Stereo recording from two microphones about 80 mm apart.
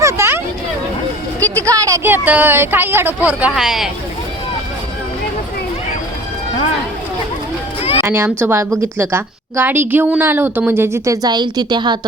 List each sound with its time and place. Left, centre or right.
0.0 s hubbub: right
1.5 s a sound: right
2.0 s speech: right
3.5 s speech: centre
8.0 s speech: right
11.3 s a woman's voice: right